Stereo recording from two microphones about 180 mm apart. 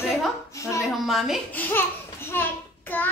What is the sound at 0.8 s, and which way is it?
Speech, centre (ahead or behind).